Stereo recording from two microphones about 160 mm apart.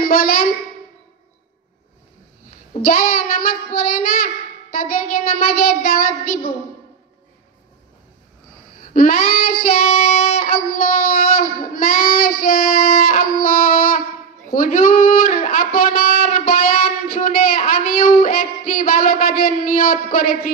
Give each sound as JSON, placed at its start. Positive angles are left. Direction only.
{"t": 0.0, "sound": "a sound", "side_deg": 65}
{"t": 2.8, "sound": "a child's voice", "side_deg": 60}
{"t": 8.9, "sound": "child singing", "side_deg": 60}
{"t": 14.5, "sound": "a man's voice", "side_deg": 60}